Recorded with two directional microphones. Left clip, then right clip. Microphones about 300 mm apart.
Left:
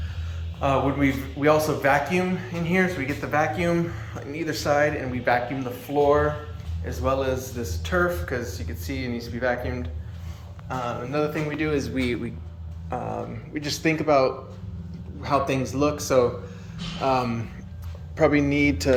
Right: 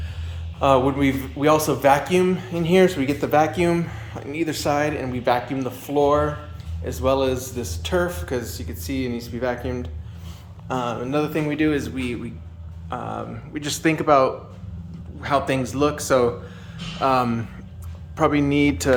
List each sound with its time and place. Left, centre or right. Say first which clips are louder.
0.6 s a man's voice: right 5 dB; centre
12.9 s a man's voice: right 1 dB; centre
18.3 s speech: right 3 dB; right